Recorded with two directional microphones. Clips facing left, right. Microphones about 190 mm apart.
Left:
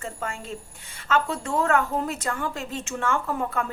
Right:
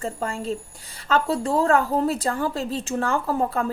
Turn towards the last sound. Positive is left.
turn(degrees=-35)  # may be behind; listen again after turning